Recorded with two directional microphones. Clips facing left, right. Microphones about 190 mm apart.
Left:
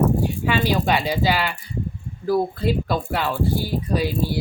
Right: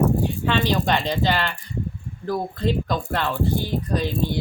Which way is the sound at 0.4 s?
10° left (ahead or behind).